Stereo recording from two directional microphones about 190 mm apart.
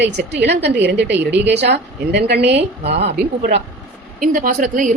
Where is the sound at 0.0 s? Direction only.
65° right (ahead or behind).